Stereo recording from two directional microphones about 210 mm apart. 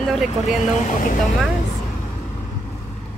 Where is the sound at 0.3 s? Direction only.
35° left (ahead or behind).